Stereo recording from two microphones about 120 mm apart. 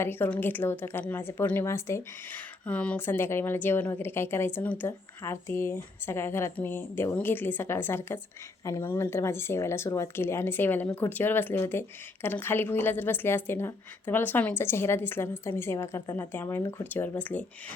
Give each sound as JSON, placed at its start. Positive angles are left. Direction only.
{"t": 0.0, "sound": "a woman's voice", "side_deg": 15}